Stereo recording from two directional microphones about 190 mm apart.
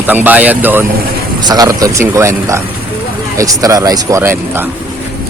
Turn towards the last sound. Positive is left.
turn(degrees=-10)  # may be behind; listen again after turning